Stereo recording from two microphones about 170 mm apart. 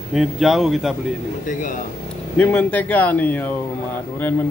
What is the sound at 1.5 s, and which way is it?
Speech, 50° left (ahead or behind).